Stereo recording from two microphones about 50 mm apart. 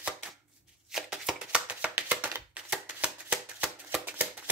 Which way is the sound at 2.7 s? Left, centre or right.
Right.